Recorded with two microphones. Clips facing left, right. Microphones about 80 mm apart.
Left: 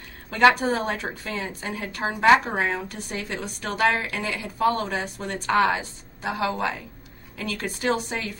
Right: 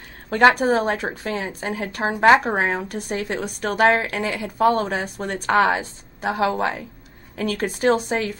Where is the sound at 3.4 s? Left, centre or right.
Right.